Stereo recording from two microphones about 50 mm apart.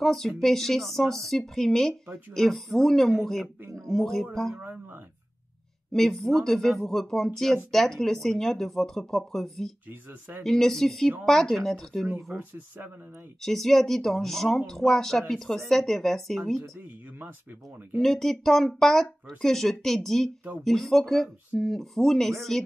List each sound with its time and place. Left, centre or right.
0.0 s speech: centre
3.6 s a sound: right
3.9 s speech: centre
5.9 s speech: centre
12.4 s speech: right
13.4 s speech: centre
17.9 s speech: centre